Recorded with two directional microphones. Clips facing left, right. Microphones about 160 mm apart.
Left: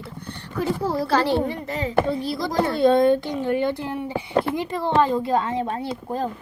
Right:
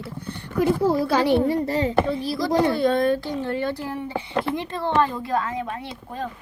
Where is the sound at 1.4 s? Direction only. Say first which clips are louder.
Right 5 dB; 35° right (ahead or behind).